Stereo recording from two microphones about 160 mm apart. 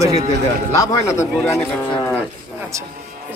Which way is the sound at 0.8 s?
20° left (ahead or behind).